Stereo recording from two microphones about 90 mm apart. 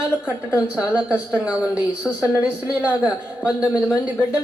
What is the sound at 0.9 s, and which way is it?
A man's voice, 15° right (ahead or behind).